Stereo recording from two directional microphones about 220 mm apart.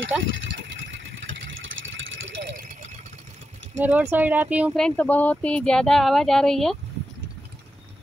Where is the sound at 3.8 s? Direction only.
10° right (ahead or behind).